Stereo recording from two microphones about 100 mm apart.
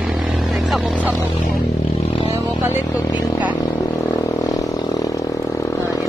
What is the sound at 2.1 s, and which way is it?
Vehicle, 90° left.